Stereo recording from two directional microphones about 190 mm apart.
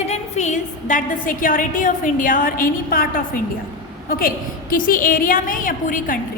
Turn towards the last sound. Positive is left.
turn(degrees=45)  # may be behind; listen again after turning